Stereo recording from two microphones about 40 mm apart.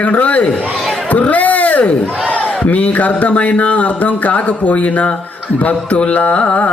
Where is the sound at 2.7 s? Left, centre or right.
Left.